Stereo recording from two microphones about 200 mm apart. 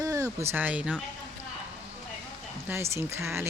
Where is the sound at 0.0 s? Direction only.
15° right (ahead or behind).